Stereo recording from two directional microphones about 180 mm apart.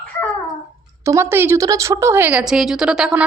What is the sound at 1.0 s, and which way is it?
A woman's voice, 15° right (ahead or behind).